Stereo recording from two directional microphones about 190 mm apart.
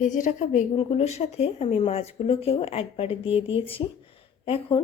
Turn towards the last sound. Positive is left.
turn(degrees=30)  # may be behind; listen again after turning